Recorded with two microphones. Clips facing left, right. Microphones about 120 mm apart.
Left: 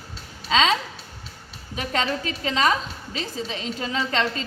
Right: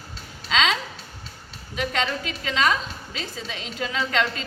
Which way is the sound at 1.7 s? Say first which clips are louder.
Even; 40° left (ahead or behind).